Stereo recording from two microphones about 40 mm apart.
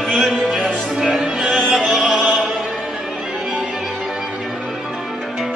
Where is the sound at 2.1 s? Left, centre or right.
Right.